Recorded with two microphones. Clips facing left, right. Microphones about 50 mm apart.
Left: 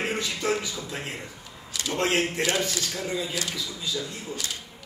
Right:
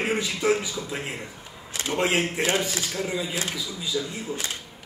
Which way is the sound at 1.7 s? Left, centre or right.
Right.